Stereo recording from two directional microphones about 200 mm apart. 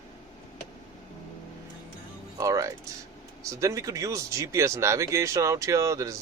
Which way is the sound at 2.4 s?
15° right (ahead or behind).